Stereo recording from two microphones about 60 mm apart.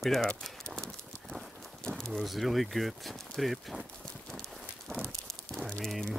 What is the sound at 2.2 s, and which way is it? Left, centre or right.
Speech, centre.